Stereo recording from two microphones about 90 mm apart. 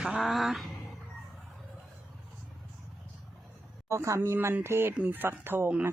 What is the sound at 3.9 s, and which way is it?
Speech, 35° right (ahead or behind).